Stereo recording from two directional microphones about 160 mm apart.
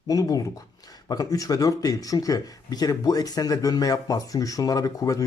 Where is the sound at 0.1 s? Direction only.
20° left (ahead or behind).